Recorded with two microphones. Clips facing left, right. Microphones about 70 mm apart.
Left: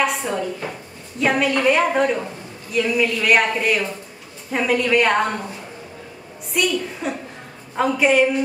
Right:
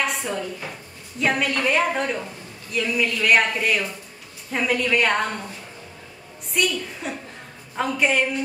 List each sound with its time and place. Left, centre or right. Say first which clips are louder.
0.0 s a sound: left 4 dB; centre
1.2 s speech: left 4 dB; centre
6.5 s speech: left 3 dB; centre